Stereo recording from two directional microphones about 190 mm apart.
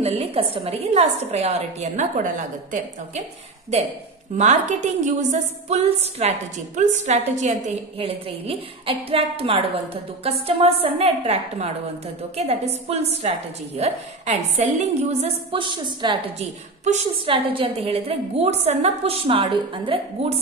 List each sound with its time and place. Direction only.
0.0 s a woman's voice: 30° right (ahead or behind)
4.4 s a woman's voice: 40° right (ahead or behind)
16.3 s a woman's voice: 35° right (ahead or behind)